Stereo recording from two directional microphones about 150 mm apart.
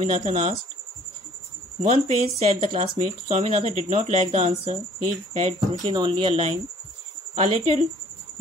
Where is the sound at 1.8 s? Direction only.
50° right (ahead or behind).